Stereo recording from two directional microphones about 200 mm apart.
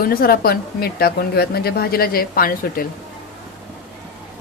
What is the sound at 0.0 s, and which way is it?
Speech, 50° left (ahead or behind).